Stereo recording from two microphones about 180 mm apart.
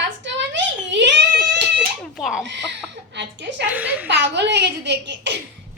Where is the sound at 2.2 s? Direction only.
5° right (ahead or behind).